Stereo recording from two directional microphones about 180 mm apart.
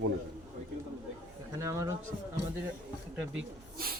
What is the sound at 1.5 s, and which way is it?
Speech, 15° right (ahead or behind).